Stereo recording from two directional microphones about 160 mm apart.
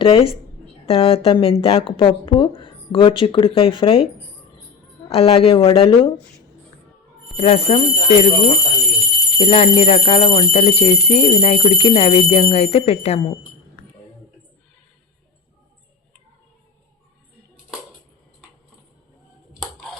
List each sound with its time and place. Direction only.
0.0 s speech: 35° left (ahead or behind)
7.3 s speech: 40° left (ahead or behind)
9.4 s speech: 40° left (ahead or behind)